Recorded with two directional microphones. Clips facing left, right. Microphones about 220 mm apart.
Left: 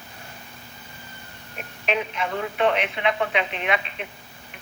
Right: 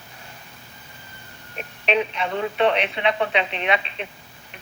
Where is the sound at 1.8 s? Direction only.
30° right (ahead or behind).